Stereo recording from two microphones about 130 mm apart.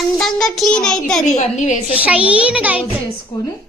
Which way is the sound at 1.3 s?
65° left (ahead or behind).